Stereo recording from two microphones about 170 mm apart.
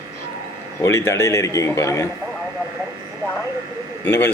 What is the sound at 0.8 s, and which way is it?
Speech, 15° left (ahead or behind).